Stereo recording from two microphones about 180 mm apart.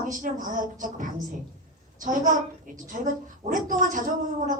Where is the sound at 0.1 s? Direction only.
45° right (ahead or behind).